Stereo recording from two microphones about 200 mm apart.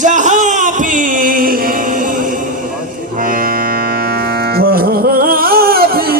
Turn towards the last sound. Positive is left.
turn(degrees=-50)  # may be behind; listen again after turning